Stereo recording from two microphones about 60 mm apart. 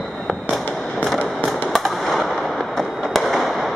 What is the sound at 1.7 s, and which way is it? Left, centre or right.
Fireworks, centre.